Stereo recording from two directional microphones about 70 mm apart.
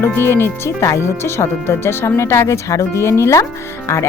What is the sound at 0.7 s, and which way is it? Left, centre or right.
Speech, left.